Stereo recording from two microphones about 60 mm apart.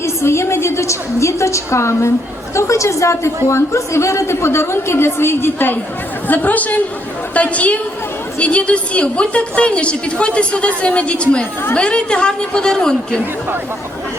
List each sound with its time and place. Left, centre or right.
0.0 s a woman's voice: left
6.2 s a woman's voice: left; by 13.0 s centre